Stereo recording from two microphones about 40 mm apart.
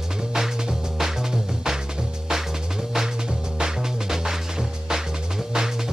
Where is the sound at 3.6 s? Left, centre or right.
Centre.